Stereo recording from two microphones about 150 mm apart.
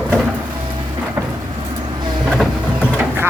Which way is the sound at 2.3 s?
5° right (ahead or behind).